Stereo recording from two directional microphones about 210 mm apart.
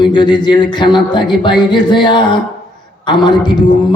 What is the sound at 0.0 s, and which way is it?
A man's voice, 20° left (ahead or behind).